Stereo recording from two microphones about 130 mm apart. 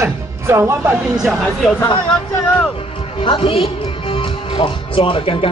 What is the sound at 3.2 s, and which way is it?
Speech, 40° left (ahead or behind).